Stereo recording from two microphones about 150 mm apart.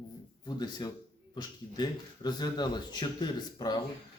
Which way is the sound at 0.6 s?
25° left (ahead or behind).